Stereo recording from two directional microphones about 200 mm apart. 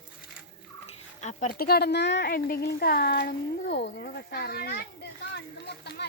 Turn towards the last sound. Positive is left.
turn(degrees=55)  # may be behind; listen again after turning